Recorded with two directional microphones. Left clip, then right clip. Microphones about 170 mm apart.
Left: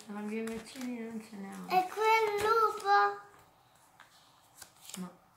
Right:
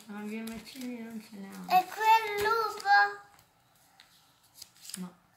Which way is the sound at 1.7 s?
50° right (ahead or behind).